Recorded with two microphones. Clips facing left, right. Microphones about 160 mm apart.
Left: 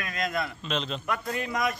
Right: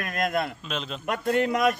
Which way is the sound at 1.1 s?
65° right (ahead or behind).